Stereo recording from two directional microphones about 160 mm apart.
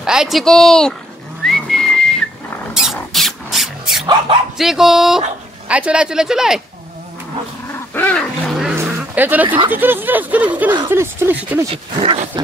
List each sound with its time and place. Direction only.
0.0 s speech: 5° right (ahead or behind)
1.4 s whistling: centre (ahead or behind)
2.7 s a sound: centre (ahead or behind)
4.0 s speech: 35° right (ahead or behind)
4.6 s speech: centre (ahead or behind)
7.6 s dog: 15° left (ahead or behind)
8.8 s a sound: 10° right (ahead or behind)
9.7 s speech: 10° right (ahead or behind)
11.7 s speech: 35° right (ahead or behind)